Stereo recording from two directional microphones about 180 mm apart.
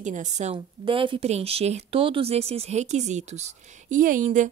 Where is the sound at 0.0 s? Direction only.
40° right (ahead or behind).